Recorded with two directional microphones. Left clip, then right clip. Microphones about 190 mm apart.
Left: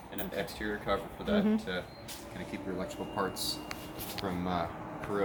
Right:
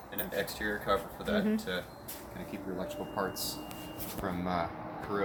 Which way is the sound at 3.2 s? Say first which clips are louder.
Left 2 dB; centre (ahead or behind).